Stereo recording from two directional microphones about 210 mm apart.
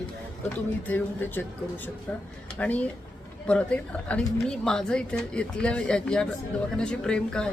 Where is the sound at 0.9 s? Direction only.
10° left (ahead or behind).